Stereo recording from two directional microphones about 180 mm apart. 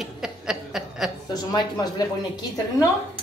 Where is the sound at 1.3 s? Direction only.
20° left (ahead or behind).